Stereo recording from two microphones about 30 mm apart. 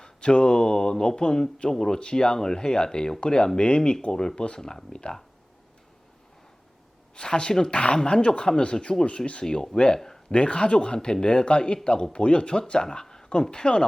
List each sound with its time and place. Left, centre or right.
0.0 s speech: left
7.2 s speech: left
9.0 s speech: left
9.4 s speech: left